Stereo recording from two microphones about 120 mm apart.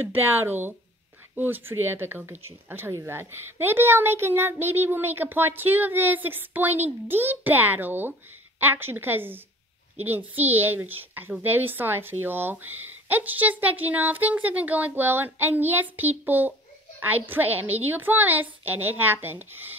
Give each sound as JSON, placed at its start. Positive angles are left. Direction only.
{"t": 0.0, "sound": "a child's voice", "side_deg": -15}